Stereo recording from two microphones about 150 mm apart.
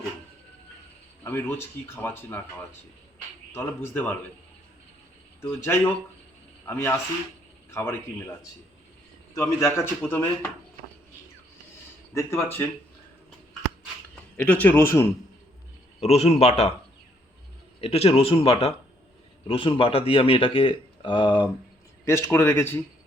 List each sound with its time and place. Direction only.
1.2 s speech: 15° left (ahead or behind)
3.5 s speech: 15° left (ahead or behind)
5.4 s a man's voice: 15° left (ahead or behind)
9.3 s a man's voice: 20° left (ahead or behind)
12.1 s a man's voice: 20° left (ahead or behind)
14.3 s speech: 10° left (ahead or behind)
16.0 s a man's voice: 45° left (ahead or behind)
17.7 s speech: 40° left (ahead or behind)
22.0 s speech: 20° left (ahead or behind)